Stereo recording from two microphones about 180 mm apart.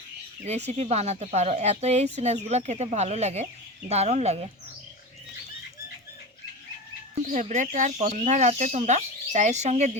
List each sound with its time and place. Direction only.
0.4 s speech: 40° right (ahead or behind)
7.2 s speech: 40° right (ahead or behind)